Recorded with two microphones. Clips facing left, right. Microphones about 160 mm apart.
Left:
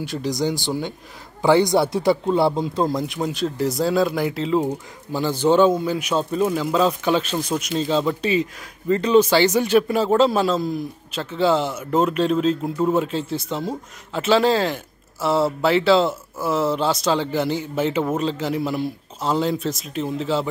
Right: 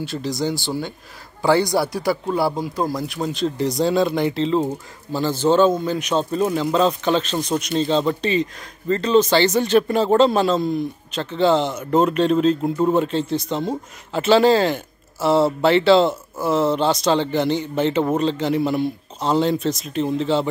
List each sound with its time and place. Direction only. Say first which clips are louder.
0.0 s speech: left 1 dB; 15° left (ahead or behind)